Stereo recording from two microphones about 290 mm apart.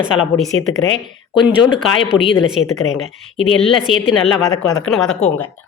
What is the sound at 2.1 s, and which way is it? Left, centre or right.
Speech, centre.